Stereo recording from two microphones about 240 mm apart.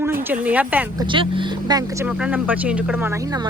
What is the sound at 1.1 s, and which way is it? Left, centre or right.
Speech, right.